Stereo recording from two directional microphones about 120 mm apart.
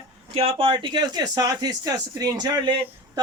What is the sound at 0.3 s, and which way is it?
Speech, 50° right (ahead or behind).